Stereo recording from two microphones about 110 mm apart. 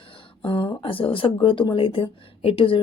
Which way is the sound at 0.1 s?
50° left (ahead or behind).